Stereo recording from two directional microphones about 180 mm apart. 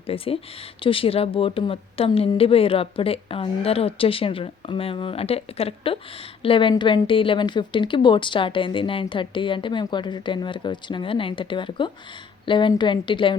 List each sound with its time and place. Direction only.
0.1 s a woman's voice: 30° left (ahead or behind)